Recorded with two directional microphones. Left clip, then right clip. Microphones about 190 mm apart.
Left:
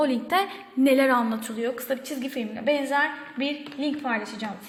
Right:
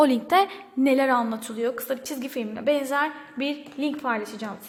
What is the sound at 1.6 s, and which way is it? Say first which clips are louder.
A woman's voice: right 2 dB; 35° right (ahead or behind).